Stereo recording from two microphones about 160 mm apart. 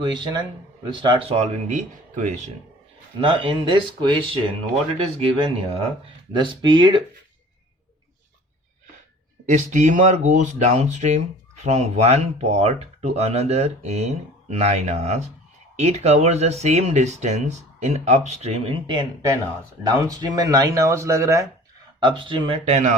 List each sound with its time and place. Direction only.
0.0 s speech: 30° right (ahead or behind)
1.4 s speech: 50° right (ahead or behind)
3.2 s speech: 35° right (ahead or behind)
5.2 s speech: 35° right (ahead or behind)
9.5 s speech: 50° right (ahead or behind); by 21.4 s 20° right (ahead or behind)
22.0 s speech: 30° right (ahead or behind); by 23.0 s 45° right (ahead or behind)